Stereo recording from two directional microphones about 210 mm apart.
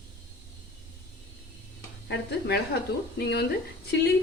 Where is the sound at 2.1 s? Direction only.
55° left (ahead or behind).